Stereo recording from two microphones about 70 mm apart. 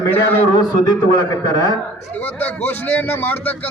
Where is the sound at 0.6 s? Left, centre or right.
Left.